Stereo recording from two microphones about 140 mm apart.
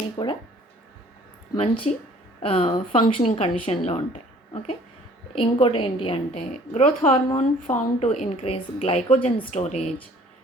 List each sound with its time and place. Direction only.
0.2 s speech: 35° left (ahead or behind)
1.5 s speech: 45° left (ahead or behind)
6.7 s speech: 60° left (ahead or behind)